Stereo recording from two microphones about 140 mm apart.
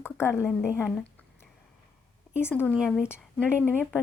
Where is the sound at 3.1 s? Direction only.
10° left (ahead or behind).